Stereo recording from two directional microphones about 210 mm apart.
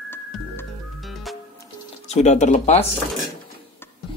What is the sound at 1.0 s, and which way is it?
Music, centre (ahead or behind).